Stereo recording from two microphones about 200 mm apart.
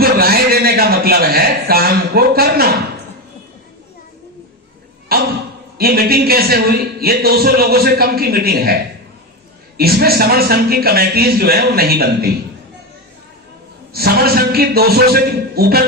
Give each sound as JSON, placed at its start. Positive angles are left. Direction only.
{"t": 0.0, "sound": "a man's voice", "side_deg": -50}
{"t": 5.1, "sound": "a sound", "side_deg": -50}
{"t": 5.7, "sound": "speech", "side_deg": -50}
{"t": 13.9, "sound": "speech", "side_deg": -50}